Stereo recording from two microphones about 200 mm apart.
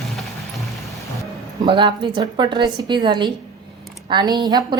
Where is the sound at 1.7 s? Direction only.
25° right (ahead or behind).